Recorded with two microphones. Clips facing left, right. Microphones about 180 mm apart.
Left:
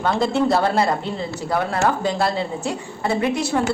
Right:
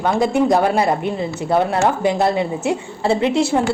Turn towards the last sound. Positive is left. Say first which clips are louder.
# right 4 dB
turn(degrees=-25)  # may be behind; listen again after turning